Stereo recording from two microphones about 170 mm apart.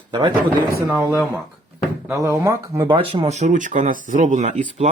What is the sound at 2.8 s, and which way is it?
Speech, 30° right (ahead or behind).